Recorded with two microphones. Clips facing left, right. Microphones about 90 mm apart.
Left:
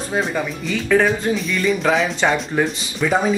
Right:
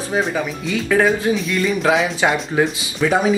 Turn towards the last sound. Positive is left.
turn(degrees=-5)  # may be behind; listen again after turning